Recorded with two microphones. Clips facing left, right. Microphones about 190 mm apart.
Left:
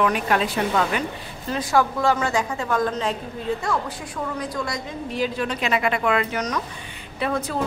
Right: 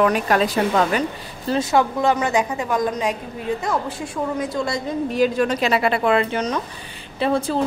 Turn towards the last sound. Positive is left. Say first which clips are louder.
# right 5 dB
turn(degrees=-30)  # may be behind; listen again after turning